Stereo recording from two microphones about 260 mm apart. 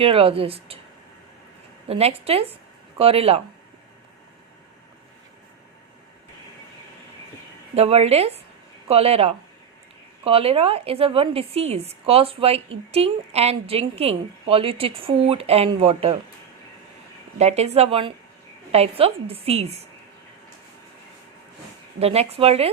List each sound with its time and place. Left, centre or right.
0.0 s a woman's voice: right
1.9 s a woman's voice: right
7.8 s a woman's voice: right
17.3 s a woman's voice: right
21.9 s a woman's voice: right